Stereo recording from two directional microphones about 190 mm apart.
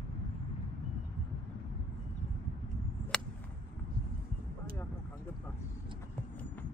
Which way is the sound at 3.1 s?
5° left (ahead or behind).